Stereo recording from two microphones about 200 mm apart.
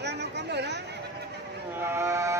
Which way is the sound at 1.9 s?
15° right (ahead or behind).